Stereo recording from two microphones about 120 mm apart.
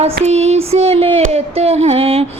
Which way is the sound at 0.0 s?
65° right (ahead or behind).